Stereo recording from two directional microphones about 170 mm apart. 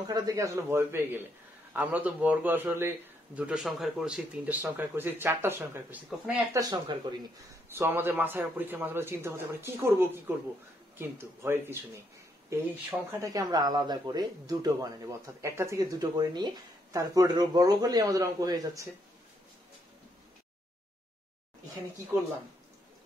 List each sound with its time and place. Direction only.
0.0 s speech: 20° right (ahead or behind); by 6.4 s 5° right (ahead or behind)
6.5 s speech: 25° right (ahead or behind)
7.7 s speech: 10° right (ahead or behind)